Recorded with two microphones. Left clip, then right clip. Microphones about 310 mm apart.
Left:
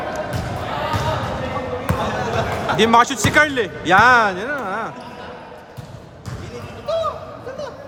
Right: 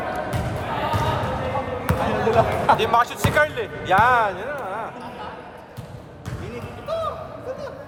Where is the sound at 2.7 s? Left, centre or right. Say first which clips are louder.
Left 6 dB; left.